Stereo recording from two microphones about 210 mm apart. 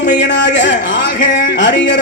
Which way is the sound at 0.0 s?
55° left (ahead or behind).